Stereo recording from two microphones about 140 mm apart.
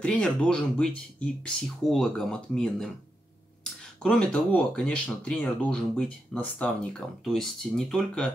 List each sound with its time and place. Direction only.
0.0 s speech: 5° left (ahead or behind)
4.0 s speech: 5° left (ahead or behind)